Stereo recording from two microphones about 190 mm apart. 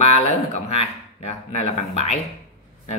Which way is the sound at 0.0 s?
30° left (ahead or behind).